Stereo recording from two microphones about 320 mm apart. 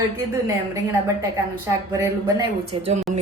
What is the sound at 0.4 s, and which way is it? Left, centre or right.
A woman's voice, centre.